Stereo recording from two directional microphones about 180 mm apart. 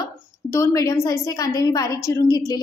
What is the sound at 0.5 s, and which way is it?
A woman's voice, 15° left (ahead or behind).